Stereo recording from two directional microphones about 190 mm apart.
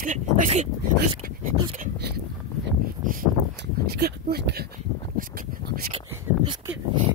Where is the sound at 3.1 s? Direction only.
45° right (ahead or behind).